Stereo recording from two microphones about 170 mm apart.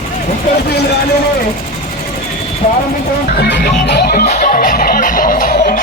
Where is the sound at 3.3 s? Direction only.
75° left (ahead or behind).